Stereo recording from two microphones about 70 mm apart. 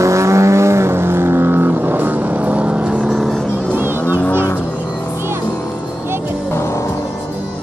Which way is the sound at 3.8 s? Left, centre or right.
Right.